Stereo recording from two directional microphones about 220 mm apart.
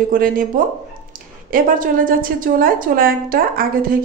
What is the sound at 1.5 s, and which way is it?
Speech, 40° right (ahead or behind).